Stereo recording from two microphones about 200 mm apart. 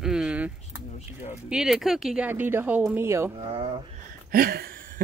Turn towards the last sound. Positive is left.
turn(degrees=-45)  # may be behind; listen again after turning